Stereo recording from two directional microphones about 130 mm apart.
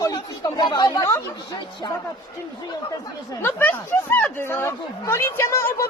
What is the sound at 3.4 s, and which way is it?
A woman's voice, 15° left (ahead or behind).